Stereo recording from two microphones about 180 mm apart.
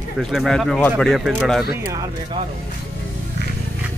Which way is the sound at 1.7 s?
15° right (ahead or behind).